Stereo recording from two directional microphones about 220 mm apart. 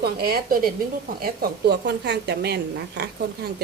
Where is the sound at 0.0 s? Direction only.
45° right (ahead or behind).